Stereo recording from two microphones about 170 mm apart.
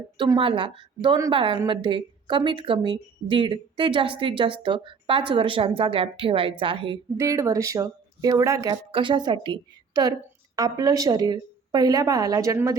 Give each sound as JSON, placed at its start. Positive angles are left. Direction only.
{"t": 0.2, "sound": "a woman's voice", "side_deg": -30}
{"t": 7.2, "sound": "a woman's voice", "side_deg": -20}